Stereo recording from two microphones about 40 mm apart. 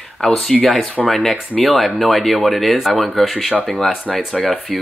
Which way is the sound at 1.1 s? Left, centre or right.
Centre.